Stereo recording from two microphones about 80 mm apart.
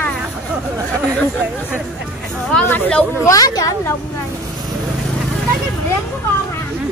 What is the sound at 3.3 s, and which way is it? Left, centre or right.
Speech, left.